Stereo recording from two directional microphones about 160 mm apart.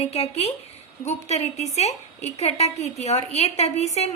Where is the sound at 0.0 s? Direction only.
40° left (ahead or behind).